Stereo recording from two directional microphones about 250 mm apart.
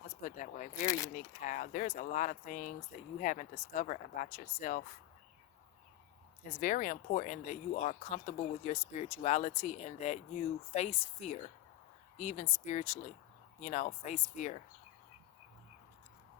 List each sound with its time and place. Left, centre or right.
0.2 s speech: left
6.5 s speech: left